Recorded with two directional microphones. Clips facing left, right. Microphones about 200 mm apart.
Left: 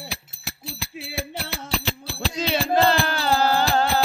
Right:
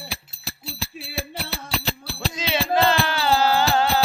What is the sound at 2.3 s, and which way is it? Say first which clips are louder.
Music: left 1 dB; 40° left (ahead or behind).